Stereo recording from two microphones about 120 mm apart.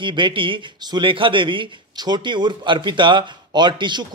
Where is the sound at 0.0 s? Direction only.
40° right (ahead or behind).